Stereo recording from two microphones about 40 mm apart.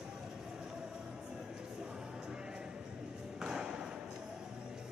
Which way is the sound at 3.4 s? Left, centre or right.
Centre.